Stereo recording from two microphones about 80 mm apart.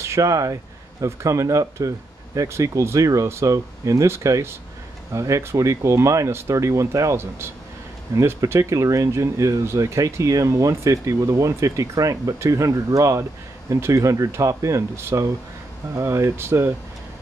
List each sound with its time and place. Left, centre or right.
0.0 s speech: right